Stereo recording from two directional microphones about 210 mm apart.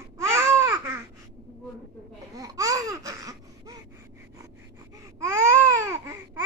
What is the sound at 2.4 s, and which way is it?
Laughter, 15° right (ahead or behind).